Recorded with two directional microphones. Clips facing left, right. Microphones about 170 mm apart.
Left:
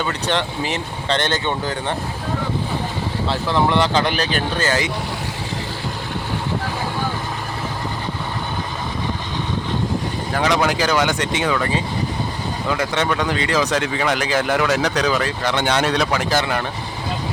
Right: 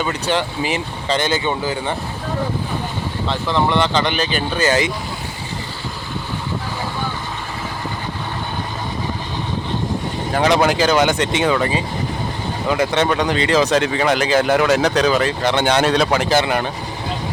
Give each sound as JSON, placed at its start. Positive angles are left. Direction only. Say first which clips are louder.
{"t": 0.0, "sound": "speech", "louder": "right 2 dB", "side_deg": -5}
{"t": 3.2, "sound": "speech", "louder": "even", "side_deg": 0}
{"t": 4.6, "sound": "speech", "louder": "right 6 dB", "side_deg": -20}
{"t": 10.4, "sound": "speech", "louder": "right 4 dB", "side_deg": -30}
{"t": 12.7, "sound": "speech", "louder": "right 4 dB", "side_deg": -25}